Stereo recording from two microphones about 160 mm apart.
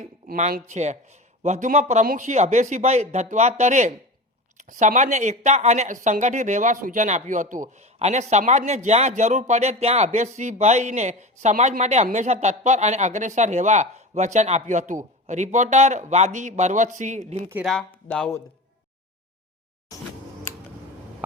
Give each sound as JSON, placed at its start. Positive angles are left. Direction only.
{"t": 0.0, "sound": "a man's voice", "side_deg": -50}
{"t": 17.7, "sound": "speech", "side_deg": 5}